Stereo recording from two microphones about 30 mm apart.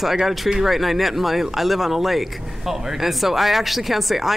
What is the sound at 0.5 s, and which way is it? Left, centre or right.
Speech, centre.